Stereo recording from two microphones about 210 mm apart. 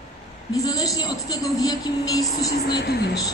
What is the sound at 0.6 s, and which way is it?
A woman's voice, 15° left (ahead or behind).